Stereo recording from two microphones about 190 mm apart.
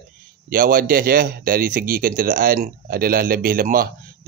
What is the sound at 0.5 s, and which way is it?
Speech, 50° right (ahead or behind).